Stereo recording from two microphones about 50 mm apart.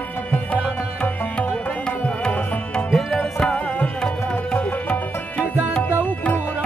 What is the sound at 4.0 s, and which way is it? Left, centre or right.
Tabla, centre.